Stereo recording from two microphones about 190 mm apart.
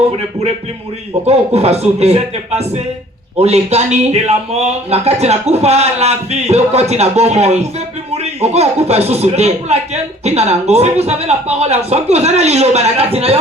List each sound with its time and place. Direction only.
1.2 s a man's voice: 35° right (ahead or behind)